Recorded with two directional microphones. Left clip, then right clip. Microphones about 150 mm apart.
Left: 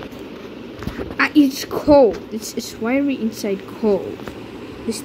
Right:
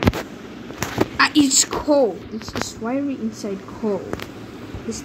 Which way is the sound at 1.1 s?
5° left (ahead or behind).